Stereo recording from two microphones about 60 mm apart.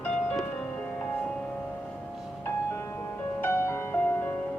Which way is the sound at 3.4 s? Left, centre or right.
Left.